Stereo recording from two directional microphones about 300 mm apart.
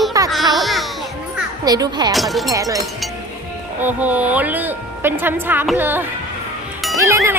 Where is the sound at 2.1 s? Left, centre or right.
Centre.